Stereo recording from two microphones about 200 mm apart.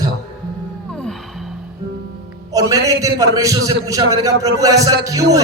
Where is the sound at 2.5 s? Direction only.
15° right (ahead or behind).